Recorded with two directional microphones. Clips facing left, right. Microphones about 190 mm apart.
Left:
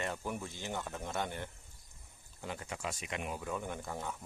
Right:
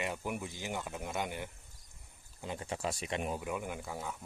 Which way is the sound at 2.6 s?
35° right (ahead or behind).